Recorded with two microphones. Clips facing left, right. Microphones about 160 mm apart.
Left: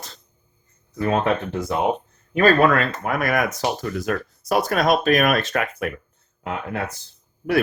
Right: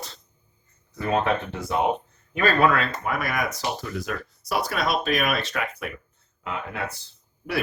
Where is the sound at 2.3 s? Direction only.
45° left (ahead or behind).